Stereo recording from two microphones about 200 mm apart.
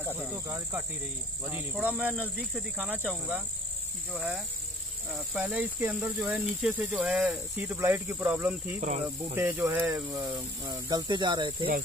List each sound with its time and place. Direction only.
0.2 s speech: 10° right (ahead or behind)